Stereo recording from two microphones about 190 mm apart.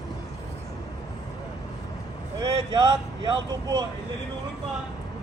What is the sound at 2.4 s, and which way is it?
Speech, 25° right (ahead or behind).